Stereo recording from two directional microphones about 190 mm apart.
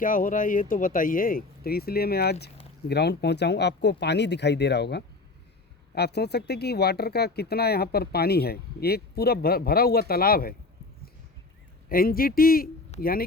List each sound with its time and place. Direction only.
0.0 s speech: 45° left (ahead or behind)
11.9 s speech: 50° left (ahead or behind)